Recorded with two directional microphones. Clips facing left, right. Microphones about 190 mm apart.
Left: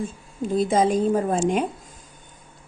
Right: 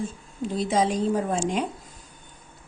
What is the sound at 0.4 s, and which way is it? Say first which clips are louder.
A woman's voice: left 4 dB; 50° left (ahead or behind).